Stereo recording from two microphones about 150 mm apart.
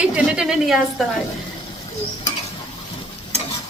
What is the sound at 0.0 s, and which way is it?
A woman's voice, 5° right (ahead or behind).